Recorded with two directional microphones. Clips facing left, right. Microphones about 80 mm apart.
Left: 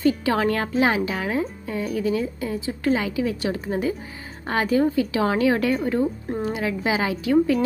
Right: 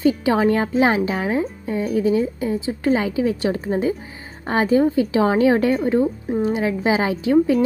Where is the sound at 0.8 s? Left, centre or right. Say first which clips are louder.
Right 3 dB; right.